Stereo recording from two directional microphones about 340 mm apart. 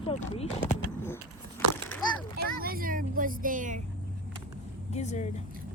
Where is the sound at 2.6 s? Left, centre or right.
Right.